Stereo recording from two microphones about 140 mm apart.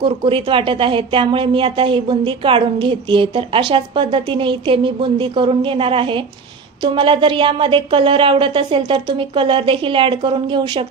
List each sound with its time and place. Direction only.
0.0 s speech: 35° right (ahead or behind)